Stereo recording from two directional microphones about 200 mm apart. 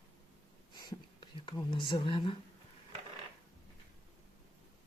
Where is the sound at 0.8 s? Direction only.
20° left (ahead or behind).